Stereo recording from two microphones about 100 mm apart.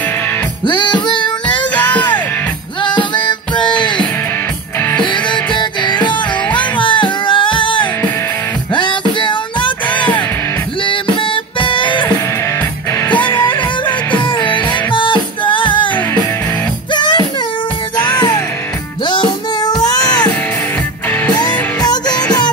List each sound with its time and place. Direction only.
0.7 s music: 50° left (ahead or behind)
1.8 s music: 15° left (ahead or behind)
2.8 s music: 50° left (ahead or behind)
5.0 s music: 55° left (ahead or behind)
11.6 s music: 55° left (ahead or behind)
13.2 s music: 20° left (ahead or behind)
13.5 s music: 55° left (ahead or behind)
16.9 s music: 50° left (ahead or behind)
19.0 s music: 45° left (ahead or behind)
21.4 s music: 45° left (ahead or behind)